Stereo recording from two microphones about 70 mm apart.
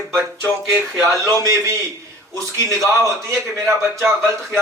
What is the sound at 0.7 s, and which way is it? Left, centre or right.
Speech, right.